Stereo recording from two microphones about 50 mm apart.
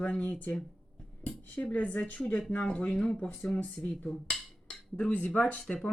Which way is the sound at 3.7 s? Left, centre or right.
Centre.